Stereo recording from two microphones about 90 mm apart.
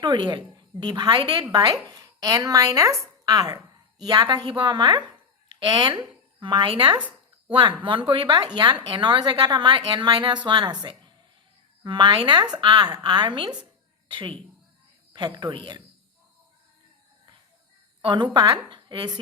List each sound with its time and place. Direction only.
0.0 s a woman's voice: 55° right (ahead or behind)
11.8 s speech: 60° right (ahead or behind)
15.1 s a woman's voice: 55° right (ahead or behind)
18.0 s speech: 60° right (ahead or behind)